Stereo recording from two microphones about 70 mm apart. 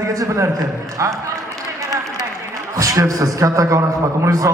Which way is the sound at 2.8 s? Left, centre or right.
Right.